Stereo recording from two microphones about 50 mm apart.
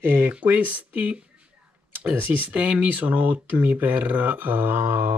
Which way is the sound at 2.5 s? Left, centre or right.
Right.